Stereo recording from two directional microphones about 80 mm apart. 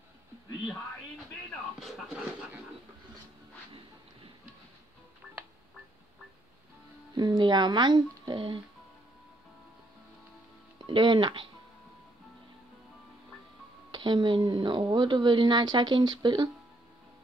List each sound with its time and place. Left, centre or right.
1.8 s speech: centre
7.2 s speech: right
10.9 s speech: right
13.9 s speech: right